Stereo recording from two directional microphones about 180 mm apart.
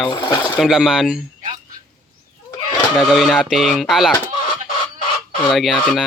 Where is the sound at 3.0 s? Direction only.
Centre (ahead or behind).